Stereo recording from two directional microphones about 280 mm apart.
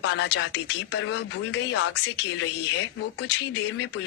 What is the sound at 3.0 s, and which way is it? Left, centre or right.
Speech, left.